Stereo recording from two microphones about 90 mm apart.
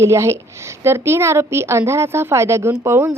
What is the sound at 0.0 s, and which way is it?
A woman's voice, 30° right (ahead or behind).